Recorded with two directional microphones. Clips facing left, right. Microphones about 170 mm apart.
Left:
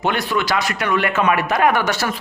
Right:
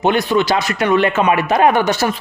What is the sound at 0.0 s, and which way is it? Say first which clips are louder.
A man's voice: right 6 dB; 20° right (ahead or behind).